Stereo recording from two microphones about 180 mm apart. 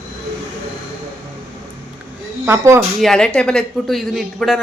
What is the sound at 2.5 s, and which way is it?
Speech, 15° right (ahead or behind).